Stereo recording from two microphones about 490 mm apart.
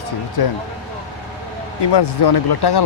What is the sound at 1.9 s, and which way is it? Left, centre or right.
Speech, left.